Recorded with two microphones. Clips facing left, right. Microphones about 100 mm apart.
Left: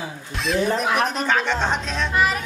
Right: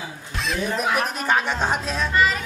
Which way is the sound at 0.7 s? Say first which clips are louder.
Left 2 dB; centre (ahead or behind).